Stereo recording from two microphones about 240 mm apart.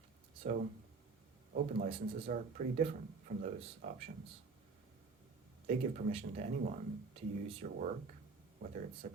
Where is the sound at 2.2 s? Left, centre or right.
Right.